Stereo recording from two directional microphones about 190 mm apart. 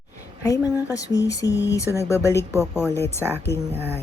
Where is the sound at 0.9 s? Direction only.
20° left (ahead or behind).